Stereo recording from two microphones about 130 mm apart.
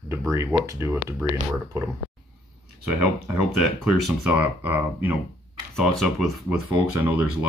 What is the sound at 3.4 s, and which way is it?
Speech, 5° right (ahead or behind).